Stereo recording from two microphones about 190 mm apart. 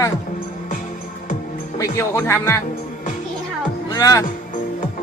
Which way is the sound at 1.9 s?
15° left (ahead or behind).